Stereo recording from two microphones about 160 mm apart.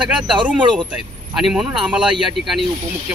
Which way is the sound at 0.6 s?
30° right (ahead or behind).